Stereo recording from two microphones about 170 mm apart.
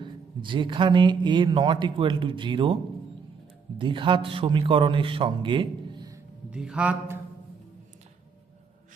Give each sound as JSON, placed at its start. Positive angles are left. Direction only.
{"t": 0.0, "sound": "speech", "side_deg": -30}
{"t": 3.8, "sound": "a man's voice", "side_deg": -30}
{"t": 6.5, "sound": "speech", "side_deg": -5}